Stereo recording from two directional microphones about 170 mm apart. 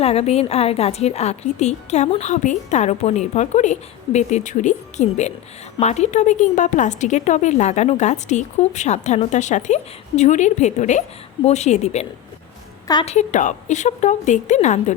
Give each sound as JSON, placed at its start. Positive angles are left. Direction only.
{"t": 0.0, "sound": "a woman's voice", "side_deg": 35}
{"t": 13.1, "sound": "a woman's voice", "side_deg": 45}